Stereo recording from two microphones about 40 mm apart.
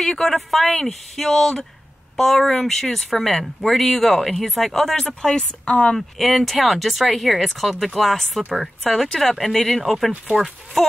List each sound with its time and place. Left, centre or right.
0.0 s speech: centre
5.2 s speech: left
5.9 s speech: centre